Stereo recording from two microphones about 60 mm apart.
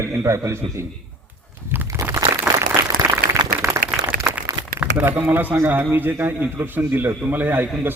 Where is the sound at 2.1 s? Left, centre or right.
Right.